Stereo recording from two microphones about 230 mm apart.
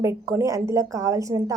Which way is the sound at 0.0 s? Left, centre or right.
Centre.